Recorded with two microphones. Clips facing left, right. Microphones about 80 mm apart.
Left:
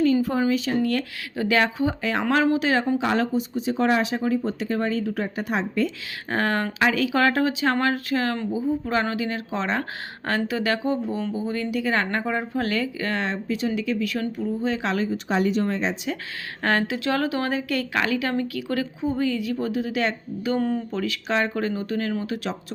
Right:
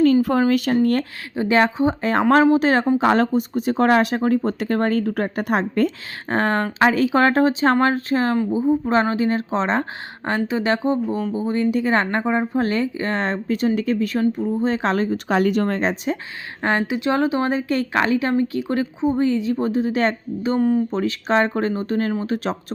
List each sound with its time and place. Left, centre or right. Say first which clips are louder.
0.0 s speech: right 5 dB; right
1.4 s speech: right 4 dB; right
3.0 s speech: right 6 dB; right
6.2 s a woman's voice: right 4 dB; right
15.3 s speech: right 4 dB; right
16.6 s a woman's voice: right 2 dB; right
20.6 s speech: right 8 dB; centre
20.9 s speech: right 5 dB; right